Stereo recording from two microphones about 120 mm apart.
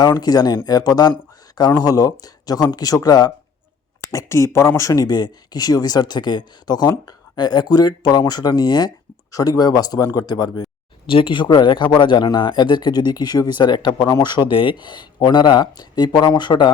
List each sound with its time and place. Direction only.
0.2 s speech: 35° left (ahead or behind)
1.1 s a sound: 35° left (ahead or behind)
1.9 s speech: 30° left (ahead or behind)
11.1 s speech: 45° left (ahead or behind)